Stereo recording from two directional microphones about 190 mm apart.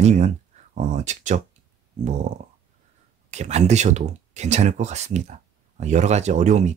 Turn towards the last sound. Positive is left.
turn(degrees=-40)  # may be behind; listen again after turning